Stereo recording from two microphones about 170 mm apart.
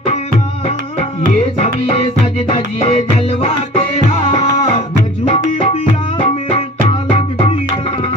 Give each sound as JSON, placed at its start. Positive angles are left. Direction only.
{"t": 1.6, "sound": "music", "side_deg": 40}